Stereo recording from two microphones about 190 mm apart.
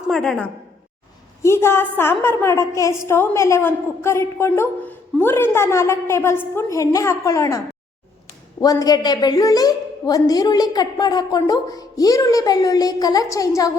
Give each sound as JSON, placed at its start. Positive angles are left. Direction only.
{"t": 0.1, "sound": "a woman's voice", "side_deg": 5}
{"t": 1.4, "sound": "a woman's voice", "side_deg": 15}
{"t": 8.6, "sound": "a woman's voice", "side_deg": 20}